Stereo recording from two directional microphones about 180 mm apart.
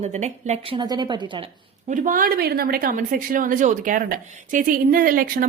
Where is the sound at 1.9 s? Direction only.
45° right (ahead or behind).